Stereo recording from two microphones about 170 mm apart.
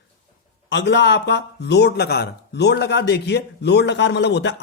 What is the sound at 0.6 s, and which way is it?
A man's voice, 85° left.